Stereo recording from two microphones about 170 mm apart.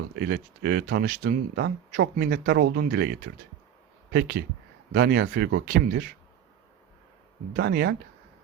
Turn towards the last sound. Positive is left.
turn(degrees=-75)  # may be behind; listen again after turning